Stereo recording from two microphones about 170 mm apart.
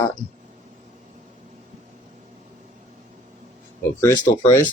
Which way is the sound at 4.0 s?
20° left (ahead or behind).